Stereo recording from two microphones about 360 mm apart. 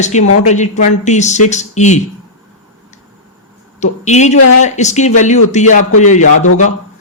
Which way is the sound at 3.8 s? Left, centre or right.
Centre.